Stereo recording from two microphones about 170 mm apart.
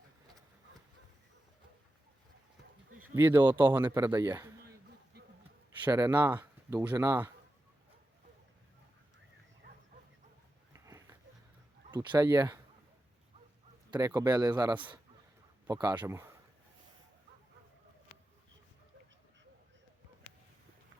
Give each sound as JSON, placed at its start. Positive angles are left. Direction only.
{"t": 3.2, "sound": "speech", "side_deg": -10}
{"t": 5.8, "sound": "speech", "side_deg": -20}
{"t": 10.7, "sound": "a sound", "side_deg": -20}
{"t": 11.9, "sound": "speech", "side_deg": -25}
{"t": 13.9, "sound": "speech", "side_deg": -20}